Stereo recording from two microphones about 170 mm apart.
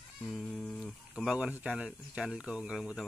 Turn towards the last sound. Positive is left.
turn(degrees=-5)  # may be behind; listen again after turning